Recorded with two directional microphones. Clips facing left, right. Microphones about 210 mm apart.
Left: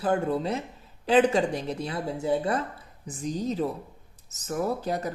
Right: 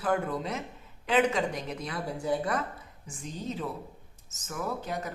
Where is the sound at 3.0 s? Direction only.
40° left (ahead or behind).